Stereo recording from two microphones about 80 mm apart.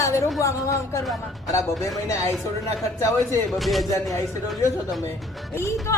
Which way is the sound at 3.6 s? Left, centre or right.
Centre.